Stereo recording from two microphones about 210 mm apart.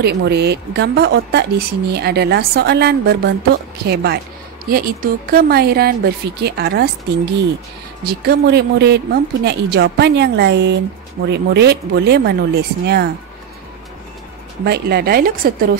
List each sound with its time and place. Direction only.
0.0 s a woman's voice: 50° right (ahead or behind)
8.0 s a woman's voice: 50° right (ahead or behind)
14.6 s a woman's voice: 50° right (ahead or behind)